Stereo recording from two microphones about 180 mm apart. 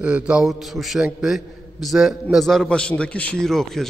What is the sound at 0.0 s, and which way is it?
A man's voice, 5° right (ahead or behind).